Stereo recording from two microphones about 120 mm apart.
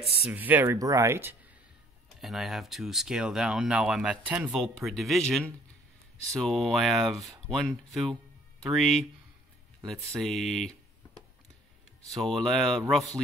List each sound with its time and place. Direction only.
0.3 s speech: 15° right (ahead or behind)
0.7 s speech: 30° right (ahead or behind)
2.1 s speech: centre (ahead or behind)
6.4 s speech: centre (ahead or behind)
12.2 s speech: 5° left (ahead or behind)